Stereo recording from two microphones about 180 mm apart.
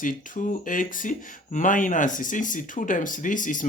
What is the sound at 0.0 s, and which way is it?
Speech, 45° left (ahead or behind).